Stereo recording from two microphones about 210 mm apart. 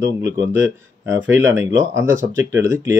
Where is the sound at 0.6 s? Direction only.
65° right (ahead or behind).